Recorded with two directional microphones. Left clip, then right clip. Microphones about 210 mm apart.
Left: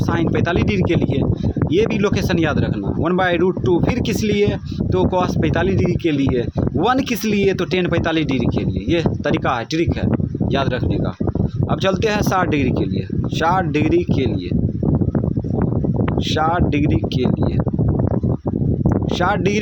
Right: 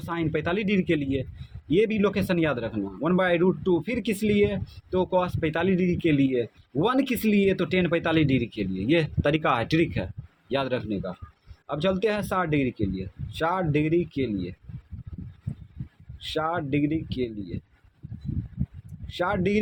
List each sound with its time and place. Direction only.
0.2 s speech: 25° left (ahead or behind)
11.7 s speech: 30° left (ahead or behind)
16.4 s speech: 30° left (ahead or behind)
19.2 s speech: 30° left (ahead or behind)